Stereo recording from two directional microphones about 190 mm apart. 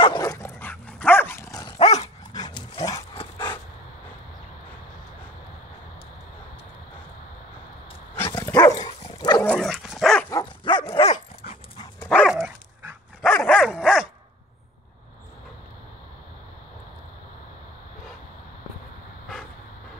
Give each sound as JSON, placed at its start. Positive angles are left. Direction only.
{"t": 0.0, "sound": "dog", "side_deg": 20}
{"t": 1.8, "sound": "dog", "side_deg": 35}
{"t": 2.3, "sound": "dog", "side_deg": 20}
{"t": 8.4, "sound": "dog", "side_deg": 15}
{"t": 9.4, "sound": "dog", "side_deg": 5}
{"t": 10.3, "sound": "dog", "side_deg": 25}
{"t": 12.0, "sound": "dog", "side_deg": 5}